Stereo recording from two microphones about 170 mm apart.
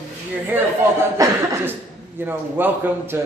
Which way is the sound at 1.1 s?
15° right (ahead or behind).